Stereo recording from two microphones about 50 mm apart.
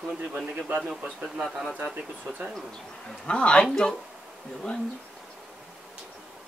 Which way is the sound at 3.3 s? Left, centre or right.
Left.